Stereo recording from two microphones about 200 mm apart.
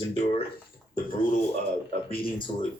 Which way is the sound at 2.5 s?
30° left (ahead or behind).